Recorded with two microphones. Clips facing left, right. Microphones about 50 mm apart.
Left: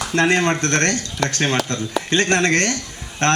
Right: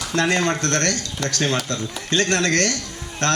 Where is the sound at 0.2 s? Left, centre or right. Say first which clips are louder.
Left 3 dB; left.